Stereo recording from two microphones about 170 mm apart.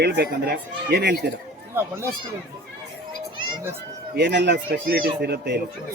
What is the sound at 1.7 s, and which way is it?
Speech, 15° right (ahead or behind).